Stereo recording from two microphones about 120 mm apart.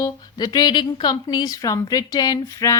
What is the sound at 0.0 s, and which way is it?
A woman's voice, 35° left (ahead or behind).